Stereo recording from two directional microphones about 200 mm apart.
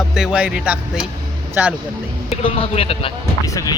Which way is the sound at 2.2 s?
30° left (ahead or behind).